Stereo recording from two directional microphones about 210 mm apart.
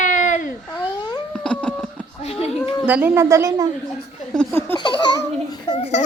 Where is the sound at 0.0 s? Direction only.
35° left (ahead or behind).